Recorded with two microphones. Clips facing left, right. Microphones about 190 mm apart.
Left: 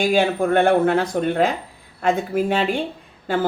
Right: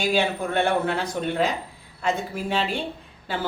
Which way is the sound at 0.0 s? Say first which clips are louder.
Left 5 dB; 50° left (ahead or behind).